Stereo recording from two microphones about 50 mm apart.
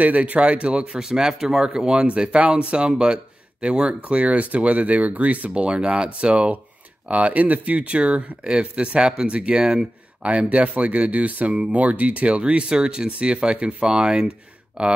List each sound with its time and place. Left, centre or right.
0.0 s speech: right